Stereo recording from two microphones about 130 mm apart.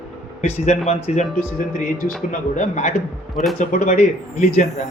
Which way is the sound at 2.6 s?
65° left (ahead or behind).